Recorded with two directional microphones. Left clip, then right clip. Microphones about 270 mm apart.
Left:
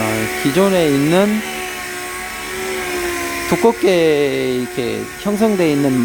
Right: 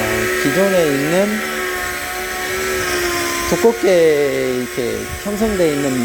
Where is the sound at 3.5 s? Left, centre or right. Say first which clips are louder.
Even; centre.